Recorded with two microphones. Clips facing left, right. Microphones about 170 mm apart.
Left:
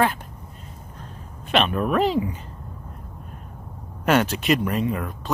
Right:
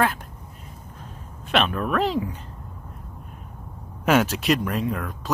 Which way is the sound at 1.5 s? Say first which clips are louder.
Left 2 dB; centre (ahead or behind).